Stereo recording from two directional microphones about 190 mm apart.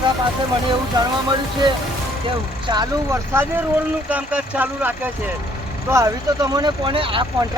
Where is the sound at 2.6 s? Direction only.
20° right (ahead or behind).